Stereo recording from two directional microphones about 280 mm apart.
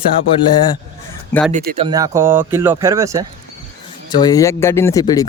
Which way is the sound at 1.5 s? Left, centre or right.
Right.